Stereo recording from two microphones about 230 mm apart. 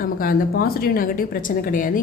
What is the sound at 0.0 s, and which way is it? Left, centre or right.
A woman's voice, left.